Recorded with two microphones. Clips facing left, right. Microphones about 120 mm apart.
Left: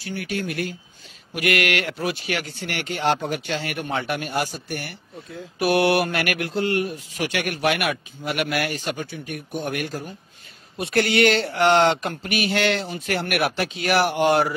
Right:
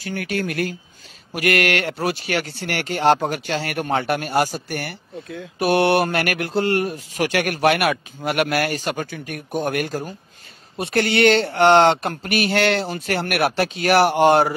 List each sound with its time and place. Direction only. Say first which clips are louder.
0.1 s speech: right 3 dB; 55° right (ahead or behind)
1.3 s speech: right 3 dB; 35° right (ahead or behind)
4.7 s speech: right 4 dB; 55° right (ahead or behind)
5.6 s speech: right 2 dB; 25° right (ahead or behind)
6.0 s speech: right 2 dB; 40° right (ahead or behind)
10.8 s speech: right 1 dB; 30° right (ahead or behind)
11.8 s speech: right 3 dB; 40° right (ahead or behind)